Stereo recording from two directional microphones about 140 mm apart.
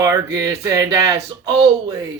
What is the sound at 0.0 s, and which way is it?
Speech, 25° right (ahead or behind).